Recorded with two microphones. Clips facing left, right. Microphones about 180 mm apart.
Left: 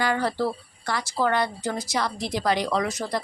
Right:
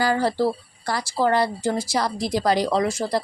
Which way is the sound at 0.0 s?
35° right (ahead or behind).